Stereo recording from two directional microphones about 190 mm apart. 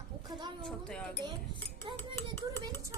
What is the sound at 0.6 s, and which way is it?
Speech, 5° left (ahead or behind).